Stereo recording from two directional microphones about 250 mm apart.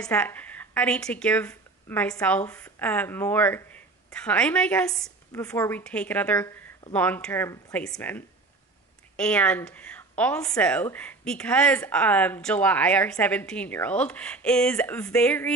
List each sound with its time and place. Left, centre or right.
0.0 s speech: centre